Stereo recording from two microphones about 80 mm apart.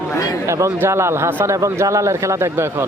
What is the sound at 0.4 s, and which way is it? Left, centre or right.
Speech, right.